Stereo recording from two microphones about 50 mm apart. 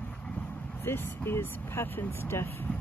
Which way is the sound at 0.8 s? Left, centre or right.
Left.